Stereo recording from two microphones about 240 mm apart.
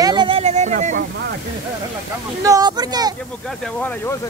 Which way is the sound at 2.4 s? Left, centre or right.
Centre.